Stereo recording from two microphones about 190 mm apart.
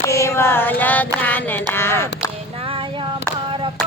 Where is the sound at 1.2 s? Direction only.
10° left (ahead or behind).